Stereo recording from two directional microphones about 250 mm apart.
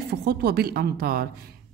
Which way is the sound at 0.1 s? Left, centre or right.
Right.